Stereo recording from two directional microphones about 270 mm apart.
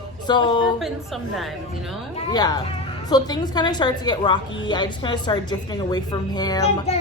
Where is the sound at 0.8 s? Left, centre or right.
Centre.